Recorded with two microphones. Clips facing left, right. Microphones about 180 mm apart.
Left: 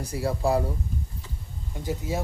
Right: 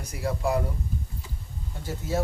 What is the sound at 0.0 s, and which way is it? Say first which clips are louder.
Speech: left 2 dB; 35° left (ahead or behind).